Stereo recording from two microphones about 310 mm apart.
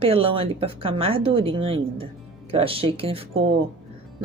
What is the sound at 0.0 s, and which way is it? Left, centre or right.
A woman's voice, centre.